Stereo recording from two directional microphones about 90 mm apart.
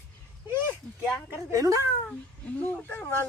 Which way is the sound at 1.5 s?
40° right (ahead or behind).